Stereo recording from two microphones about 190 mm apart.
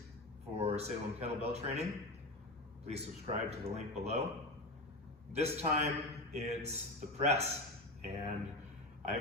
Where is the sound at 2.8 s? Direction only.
35° right (ahead or behind).